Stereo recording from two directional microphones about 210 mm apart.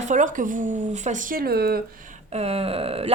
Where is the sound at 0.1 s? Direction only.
35° right (ahead or behind).